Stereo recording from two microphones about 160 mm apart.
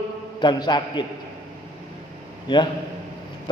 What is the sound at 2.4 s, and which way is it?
Speech, 30° left (ahead or behind).